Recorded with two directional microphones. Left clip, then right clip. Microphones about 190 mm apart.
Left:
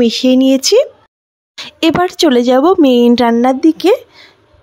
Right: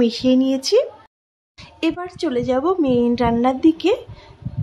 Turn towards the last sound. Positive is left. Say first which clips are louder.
# left 6 dB
turn(degrees=40)  # may be behind; listen again after turning